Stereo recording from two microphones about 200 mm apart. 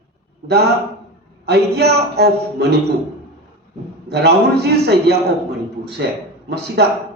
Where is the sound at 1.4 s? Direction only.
55° right (ahead or behind).